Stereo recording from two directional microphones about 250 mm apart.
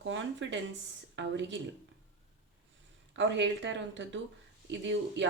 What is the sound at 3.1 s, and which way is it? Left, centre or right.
Speech, right.